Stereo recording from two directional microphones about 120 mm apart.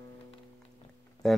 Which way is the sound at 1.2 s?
5° left (ahead or behind).